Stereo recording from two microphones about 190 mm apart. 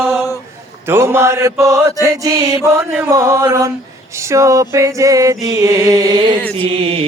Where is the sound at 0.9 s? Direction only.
15° right (ahead or behind).